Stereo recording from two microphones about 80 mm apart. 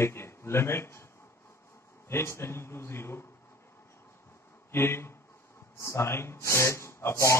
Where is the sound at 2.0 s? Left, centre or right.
Left.